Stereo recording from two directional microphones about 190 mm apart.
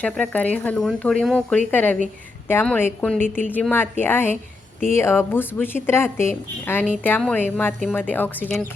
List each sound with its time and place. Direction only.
0.0 s speech: 10° left (ahead or behind)
3.2 s speech: 40° right (ahead or behind)
3.4 s speech: 10° left (ahead or behind)